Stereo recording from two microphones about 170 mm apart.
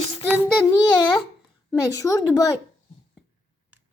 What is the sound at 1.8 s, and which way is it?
Speech, 20° left (ahead or behind).